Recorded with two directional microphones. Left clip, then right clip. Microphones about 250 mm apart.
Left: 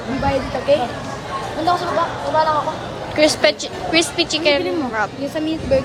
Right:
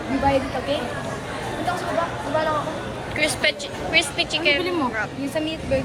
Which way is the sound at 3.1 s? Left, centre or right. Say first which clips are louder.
Left 7 dB; left.